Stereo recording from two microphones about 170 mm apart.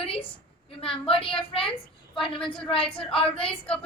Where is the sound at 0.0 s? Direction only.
35° left (ahead or behind).